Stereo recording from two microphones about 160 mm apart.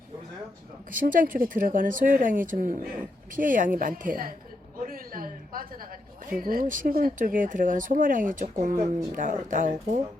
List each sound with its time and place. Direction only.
1.0 s speech: 60° right (ahead or behind)
4.9 s a sound: 65° right (ahead or behind)
6.2 s speech: 65° right (ahead or behind)
8.7 s speech: 20° right (ahead or behind)
9.1 s speech: 55° right (ahead or behind)